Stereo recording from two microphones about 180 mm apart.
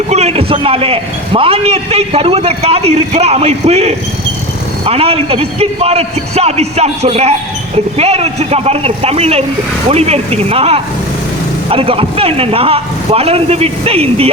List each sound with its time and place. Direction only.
0.1 s a man's voice: 35° right (ahead or behind)